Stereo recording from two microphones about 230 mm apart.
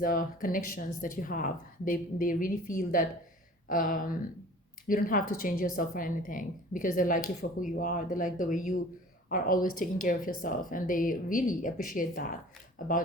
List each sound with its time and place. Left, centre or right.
0.0 s speech: left